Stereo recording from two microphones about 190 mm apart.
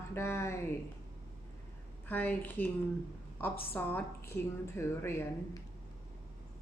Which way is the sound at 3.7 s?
10° left (ahead or behind).